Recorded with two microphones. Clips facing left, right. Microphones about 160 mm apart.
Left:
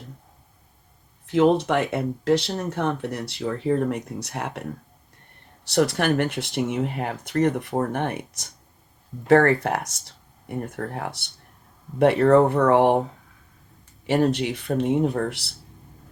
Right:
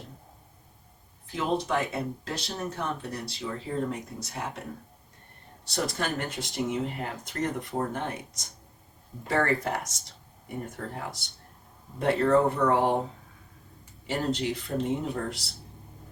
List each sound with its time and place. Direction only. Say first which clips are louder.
1.3 s speech: left 9 dB; 70° left (ahead or behind)
5.6 s speech: left 9 dB; 70° left (ahead or behind)
14.1 s speech: left 7 dB; 70° left (ahead or behind)